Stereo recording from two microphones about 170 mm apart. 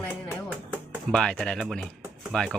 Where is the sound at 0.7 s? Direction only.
10° right (ahead or behind).